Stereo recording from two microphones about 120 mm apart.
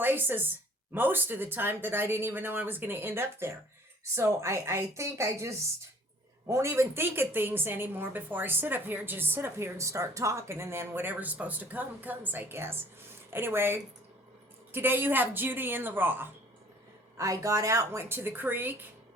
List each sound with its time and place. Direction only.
0.0 s a woman's voice: 15° right (ahead or behind)